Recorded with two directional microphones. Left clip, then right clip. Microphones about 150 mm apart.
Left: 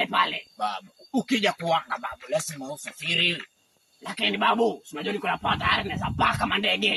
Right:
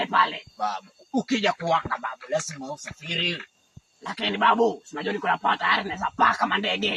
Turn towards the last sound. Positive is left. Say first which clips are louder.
# right 1 dB
turn(degrees=20)  # may be behind; listen again after turning